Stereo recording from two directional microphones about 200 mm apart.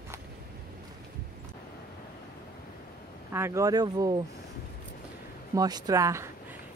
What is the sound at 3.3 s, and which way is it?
Speech, 15° right (ahead or behind).